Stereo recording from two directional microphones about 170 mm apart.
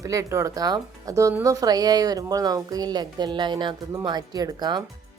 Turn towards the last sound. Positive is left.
turn(degrees=-25)  # may be behind; listen again after turning